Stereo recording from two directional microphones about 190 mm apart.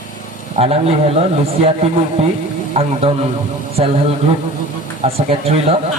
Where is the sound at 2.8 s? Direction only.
30° right (ahead or behind).